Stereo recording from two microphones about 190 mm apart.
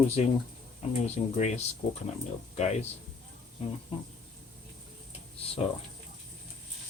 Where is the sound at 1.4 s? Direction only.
35° left (ahead or behind).